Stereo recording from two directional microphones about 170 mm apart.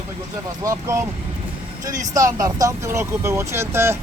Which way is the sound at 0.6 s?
15° right (ahead or behind).